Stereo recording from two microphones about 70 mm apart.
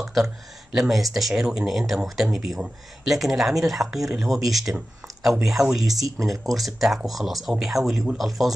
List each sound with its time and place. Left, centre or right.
0.0 s a sound: centre
0.7 s speech: centre
5.9 s speech: right
6.4 s speech: centre